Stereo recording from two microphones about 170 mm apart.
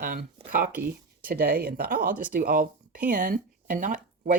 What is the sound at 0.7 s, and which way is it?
Speech, 10° right (ahead or behind).